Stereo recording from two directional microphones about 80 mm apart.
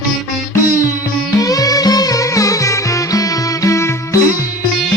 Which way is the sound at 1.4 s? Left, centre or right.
Left.